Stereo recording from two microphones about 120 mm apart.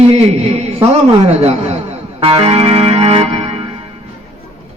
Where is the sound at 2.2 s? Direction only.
55° right (ahead or behind).